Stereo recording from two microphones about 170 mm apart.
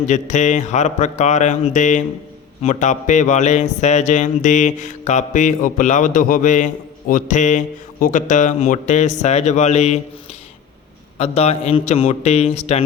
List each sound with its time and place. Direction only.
0.1 s speech: 45° left (ahead or behind)
11.2 s a man's voice: 40° left (ahead or behind)